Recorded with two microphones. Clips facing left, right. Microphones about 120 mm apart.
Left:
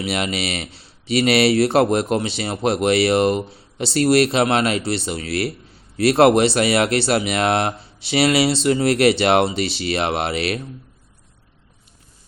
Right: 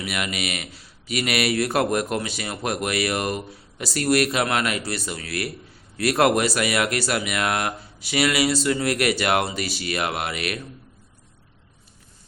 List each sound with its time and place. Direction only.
0.0 s a man's voice: 30° left (ahead or behind)